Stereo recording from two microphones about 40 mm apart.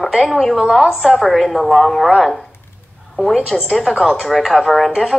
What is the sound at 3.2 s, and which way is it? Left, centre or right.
Speech, centre.